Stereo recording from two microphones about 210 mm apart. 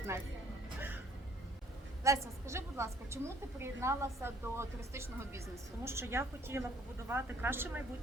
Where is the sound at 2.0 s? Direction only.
15° right (ahead or behind).